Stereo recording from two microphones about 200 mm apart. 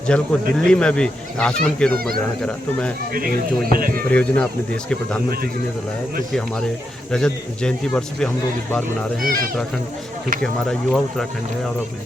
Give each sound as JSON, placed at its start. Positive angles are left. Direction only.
{"t": 0.1, "sound": "speech", "side_deg": 5}
{"t": 3.1, "sound": "speech", "side_deg": -45}
{"t": 4.1, "sound": "speech", "side_deg": 5}
{"t": 6.3, "sound": "speech", "side_deg": 5}
{"t": 9.2, "sound": "speech", "side_deg": -45}
{"t": 10.4, "sound": "speech", "side_deg": 5}